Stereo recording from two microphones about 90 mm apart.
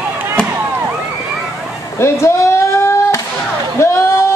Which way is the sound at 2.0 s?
30° left (ahead or behind).